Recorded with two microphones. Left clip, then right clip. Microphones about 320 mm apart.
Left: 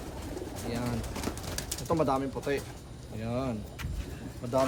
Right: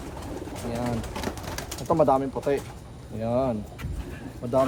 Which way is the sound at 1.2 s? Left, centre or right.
Right.